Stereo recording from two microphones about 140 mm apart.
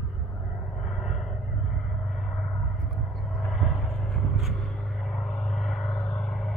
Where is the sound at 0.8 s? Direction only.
Centre (ahead or behind).